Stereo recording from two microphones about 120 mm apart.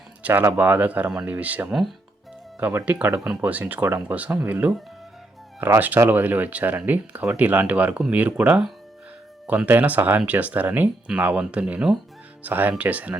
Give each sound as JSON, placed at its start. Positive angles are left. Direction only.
{"t": 0.2, "sound": "speech", "side_deg": -15}